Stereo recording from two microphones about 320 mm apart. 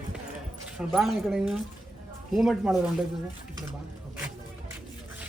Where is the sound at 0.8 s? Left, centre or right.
Centre.